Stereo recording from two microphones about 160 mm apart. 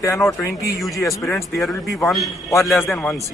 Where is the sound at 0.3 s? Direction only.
20° left (ahead or behind).